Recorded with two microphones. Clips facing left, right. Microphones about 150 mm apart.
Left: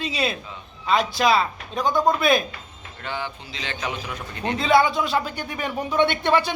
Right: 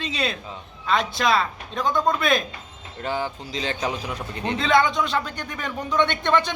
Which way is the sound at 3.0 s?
40° right (ahead or behind).